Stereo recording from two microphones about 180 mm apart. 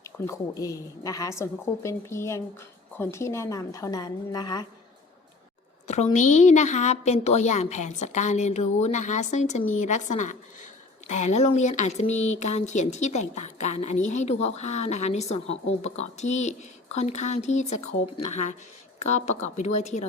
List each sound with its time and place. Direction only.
0.0 s a woman's voice: 20° left (ahead or behind)
6.1 s speech: 40° left (ahead or behind)